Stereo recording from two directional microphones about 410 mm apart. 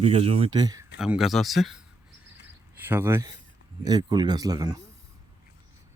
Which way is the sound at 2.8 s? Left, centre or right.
Centre.